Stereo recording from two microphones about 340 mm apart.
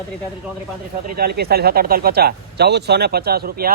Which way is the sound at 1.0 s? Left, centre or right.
Right.